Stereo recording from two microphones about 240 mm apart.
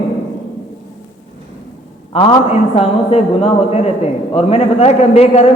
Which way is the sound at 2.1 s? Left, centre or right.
Left.